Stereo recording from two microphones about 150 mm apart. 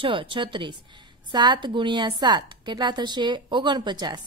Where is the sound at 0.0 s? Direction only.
35° right (ahead or behind).